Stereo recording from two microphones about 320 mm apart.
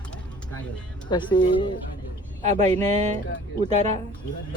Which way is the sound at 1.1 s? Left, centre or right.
Centre.